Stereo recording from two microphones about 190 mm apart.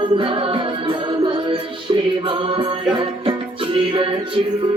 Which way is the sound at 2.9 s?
25° right (ahead or behind).